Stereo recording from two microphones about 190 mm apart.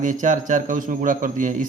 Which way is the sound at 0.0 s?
40° right (ahead or behind).